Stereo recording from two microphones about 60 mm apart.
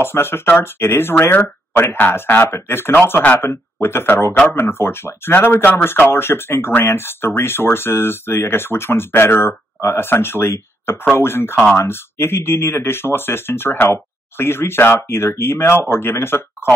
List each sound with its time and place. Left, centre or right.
0.0 s speech: left
3.3 s speech: left